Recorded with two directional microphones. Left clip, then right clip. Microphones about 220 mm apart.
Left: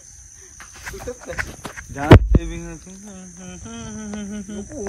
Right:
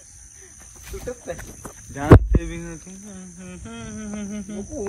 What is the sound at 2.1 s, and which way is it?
Speech, 40° left (ahead or behind).